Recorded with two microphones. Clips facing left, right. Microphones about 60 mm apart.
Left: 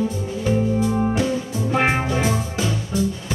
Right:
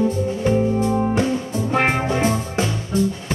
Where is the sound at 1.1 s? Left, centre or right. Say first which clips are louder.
Right 2 dB; right.